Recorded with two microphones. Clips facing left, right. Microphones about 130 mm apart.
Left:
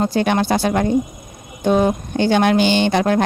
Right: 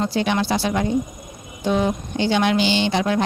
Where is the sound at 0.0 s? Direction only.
50° left (ahead or behind).